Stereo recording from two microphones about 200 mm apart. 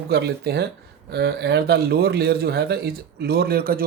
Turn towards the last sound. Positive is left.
turn(degrees=-50)  # may be behind; listen again after turning